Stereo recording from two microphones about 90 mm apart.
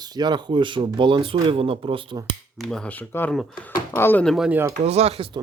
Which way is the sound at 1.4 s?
90° right.